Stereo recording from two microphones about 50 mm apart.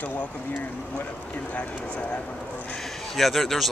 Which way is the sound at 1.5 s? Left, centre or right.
Left.